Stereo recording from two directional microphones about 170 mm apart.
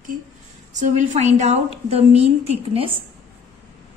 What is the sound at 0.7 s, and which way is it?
A woman's voice, 45° right (ahead or behind).